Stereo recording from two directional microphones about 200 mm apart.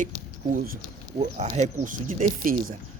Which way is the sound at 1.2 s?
30° right (ahead or behind).